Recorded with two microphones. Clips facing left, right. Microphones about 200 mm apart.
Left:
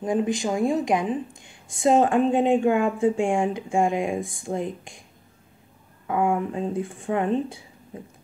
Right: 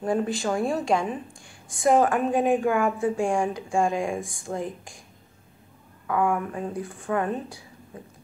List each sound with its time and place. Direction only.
0.0 s a woman's voice: 15° left (ahead or behind)
6.0 s a woman's voice: 25° left (ahead or behind)